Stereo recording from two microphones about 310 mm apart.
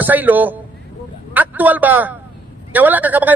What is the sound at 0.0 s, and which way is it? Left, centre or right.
A man's voice, centre.